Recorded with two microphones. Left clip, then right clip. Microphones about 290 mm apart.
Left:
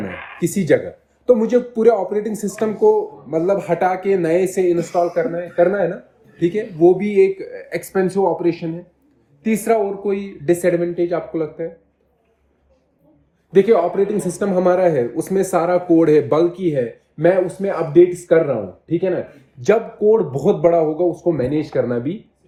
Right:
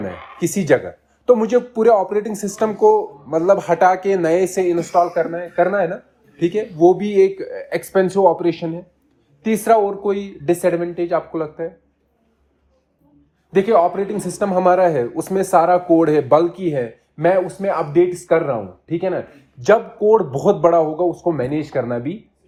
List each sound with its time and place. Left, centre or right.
0.1 s a sound: right
0.3 s speech: centre
13.5 s speech: centre